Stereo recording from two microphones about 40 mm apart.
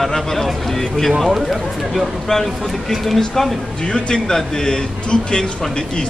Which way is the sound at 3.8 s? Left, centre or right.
Left.